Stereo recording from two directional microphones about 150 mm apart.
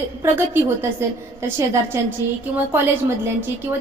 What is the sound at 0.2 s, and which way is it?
A woman's voice, 15° right (ahead or behind).